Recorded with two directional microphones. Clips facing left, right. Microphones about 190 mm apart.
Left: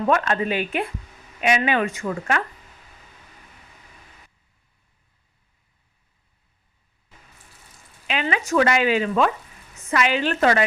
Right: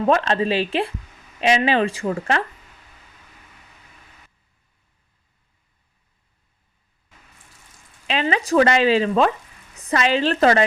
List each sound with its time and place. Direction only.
0.0 s speech: 30° right (ahead or behind)
8.0 s speech: 35° right (ahead or behind)